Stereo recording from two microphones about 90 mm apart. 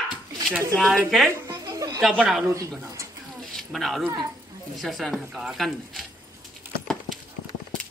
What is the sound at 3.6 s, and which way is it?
A man's voice, centre (ahead or behind).